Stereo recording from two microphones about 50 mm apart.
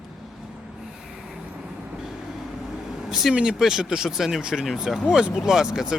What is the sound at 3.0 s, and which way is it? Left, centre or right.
Vehicle, centre.